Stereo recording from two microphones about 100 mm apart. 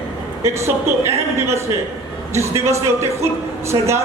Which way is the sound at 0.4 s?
30° right (ahead or behind).